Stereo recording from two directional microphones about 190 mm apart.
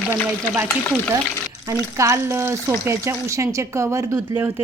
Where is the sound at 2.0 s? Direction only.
15° right (ahead or behind).